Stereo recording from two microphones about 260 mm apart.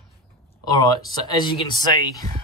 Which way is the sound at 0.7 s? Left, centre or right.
Centre.